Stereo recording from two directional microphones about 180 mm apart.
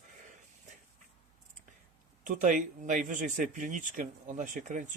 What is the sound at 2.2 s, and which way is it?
Speech, 45° right (ahead or behind).